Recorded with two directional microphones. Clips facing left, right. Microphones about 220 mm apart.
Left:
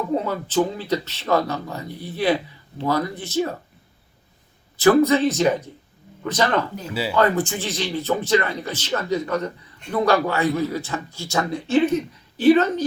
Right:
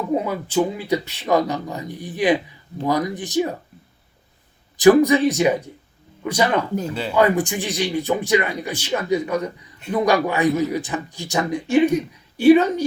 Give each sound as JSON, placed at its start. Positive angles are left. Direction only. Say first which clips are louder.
{"t": 0.1, "sound": "speech", "louder": "right 1 dB", "side_deg": -10}
{"t": 4.8, "sound": "speech", "louder": "right 3 dB", "side_deg": -15}